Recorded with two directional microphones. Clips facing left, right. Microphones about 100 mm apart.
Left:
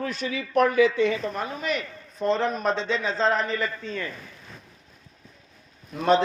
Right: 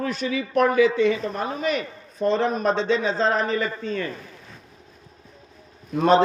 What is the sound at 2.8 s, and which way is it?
Speech, 20° right (ahead or behind).